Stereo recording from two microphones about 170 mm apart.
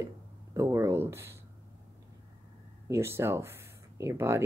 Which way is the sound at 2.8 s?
15° right (ahead or behind).